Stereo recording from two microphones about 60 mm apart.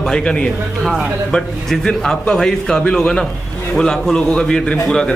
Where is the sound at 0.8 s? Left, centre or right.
Centre.